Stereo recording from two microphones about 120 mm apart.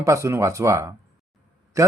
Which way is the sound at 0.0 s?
25° right (ahead or behind).